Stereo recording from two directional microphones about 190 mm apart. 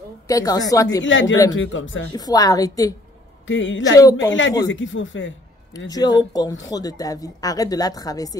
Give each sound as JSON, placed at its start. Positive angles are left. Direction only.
{"t": 0.3, "sound": "speech", "side_deg": 20}
{"t": 1.1, "sound": "speech", "side_deg": 90}
{"t": 2.1, "sound": "speech", "side_deg": 20}
{"t": 3.4, "sound": "speech", "side_deg": 80}
{"t": 3.9, "sound": "a woman's voice", "side_deg": 20}
{"t": 4.3, "sound": "speech", "side_deg": 75}
{"t": 5.9, "sound": "speech", "side_deg": 20}